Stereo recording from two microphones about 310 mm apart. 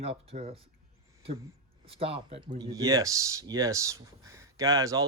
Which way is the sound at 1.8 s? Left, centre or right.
Centre.